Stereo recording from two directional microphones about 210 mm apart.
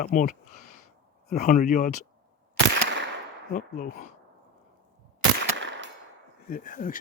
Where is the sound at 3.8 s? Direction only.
40° left (ahead or behind).